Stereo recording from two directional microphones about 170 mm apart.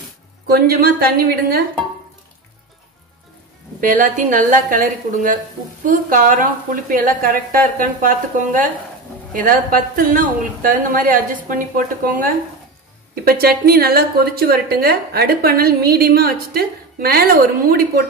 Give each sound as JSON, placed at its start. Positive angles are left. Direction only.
{"t": 0.5, "sound": "a woman's voice", "side_deg": -65}
{"t": 3.8, "sound": "a woman's voice", "side_deg": -55}